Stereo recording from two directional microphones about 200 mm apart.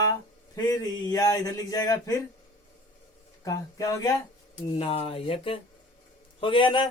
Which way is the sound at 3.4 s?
15° left (ahead or behind).